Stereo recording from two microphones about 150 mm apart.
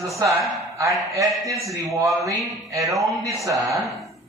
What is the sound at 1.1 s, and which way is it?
A man's voice, 20° right (ahead or behind).